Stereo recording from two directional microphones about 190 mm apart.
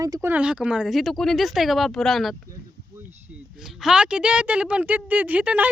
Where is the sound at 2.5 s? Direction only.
10° right (ahead or behind).